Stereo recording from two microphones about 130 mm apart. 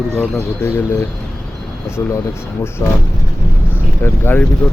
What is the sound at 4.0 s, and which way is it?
Speech, 15° left (ahead or behind).